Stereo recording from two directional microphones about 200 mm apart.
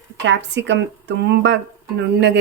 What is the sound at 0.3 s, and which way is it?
Speech, 60° right (ahead or behind).